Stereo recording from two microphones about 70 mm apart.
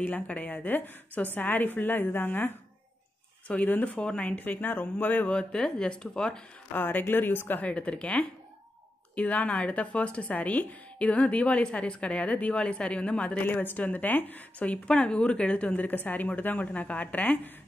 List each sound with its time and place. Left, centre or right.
0.0 s speech: left
5.3 s speech: centre
6.7 s speech: left
7.7 s speech: centre